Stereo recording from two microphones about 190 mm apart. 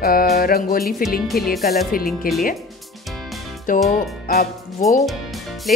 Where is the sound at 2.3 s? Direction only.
50° left (ahead or behind).